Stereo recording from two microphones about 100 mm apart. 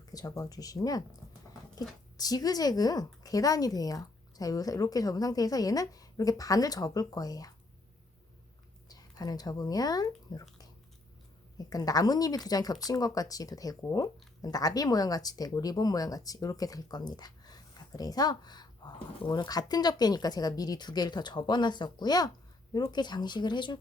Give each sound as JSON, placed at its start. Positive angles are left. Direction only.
{"t": 0.0, "sound": "speech", "side_deg": 40}
{"t": 2.1, "sound": "speech", "side_deg": 40}
{"t": 8.9, "sound": "speech", "side_deg": 40}
{"t": 11.5, "sound": "speech", "side_deg": 40}